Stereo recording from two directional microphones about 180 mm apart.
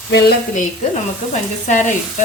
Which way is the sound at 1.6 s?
45° left (ahead or behind).